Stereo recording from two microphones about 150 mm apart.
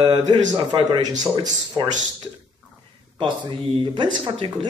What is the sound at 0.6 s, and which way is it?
Speech, 30° right (ahead or behind).